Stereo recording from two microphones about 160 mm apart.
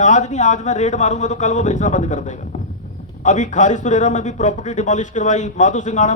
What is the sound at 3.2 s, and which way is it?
Speech, 50° left (ahead or behind).